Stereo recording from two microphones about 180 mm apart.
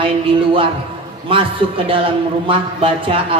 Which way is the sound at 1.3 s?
30° right (ahead or behind).